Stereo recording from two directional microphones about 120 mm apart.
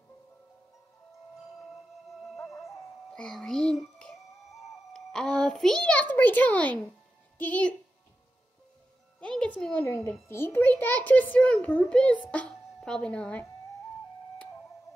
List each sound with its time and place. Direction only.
2.5 s music: centre (ahead or behind)
7.3 s a child's voice: 10° left (ahead or behind)
9.2 s speech: 5° left (ahead or behind)
9.8 s a child's voice: 20° left (ahead or behind)